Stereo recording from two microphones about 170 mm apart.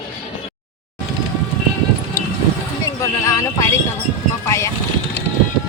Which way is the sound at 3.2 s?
20° left (ahead or behind).